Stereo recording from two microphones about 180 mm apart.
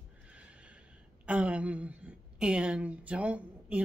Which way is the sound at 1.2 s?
5° right (ahead or behind).